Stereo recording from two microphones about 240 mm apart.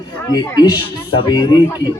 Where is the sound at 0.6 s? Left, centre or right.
Centre.